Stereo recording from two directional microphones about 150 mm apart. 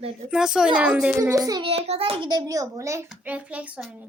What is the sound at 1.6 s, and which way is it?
A child's voice, 40° right (ahead or behind).